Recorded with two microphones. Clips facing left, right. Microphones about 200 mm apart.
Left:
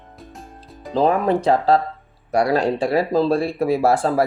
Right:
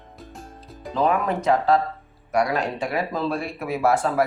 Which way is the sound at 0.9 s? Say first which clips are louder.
Left 5 dB; 30° left (ahead or behind).